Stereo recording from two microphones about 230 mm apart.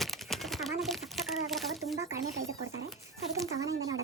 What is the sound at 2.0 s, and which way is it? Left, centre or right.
Speech, centre.